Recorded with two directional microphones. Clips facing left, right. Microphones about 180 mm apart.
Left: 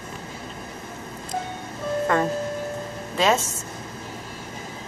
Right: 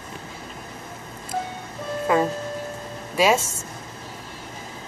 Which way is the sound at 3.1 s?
10° right (ahead or behind).